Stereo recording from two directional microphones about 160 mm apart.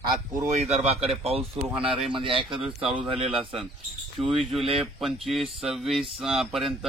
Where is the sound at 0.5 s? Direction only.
45° right (ahead or behind).